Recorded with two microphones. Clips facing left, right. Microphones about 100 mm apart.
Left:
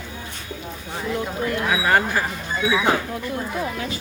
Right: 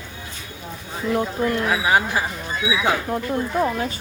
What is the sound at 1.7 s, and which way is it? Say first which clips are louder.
Speech: left 3 dB; 5° right (ahead or behind).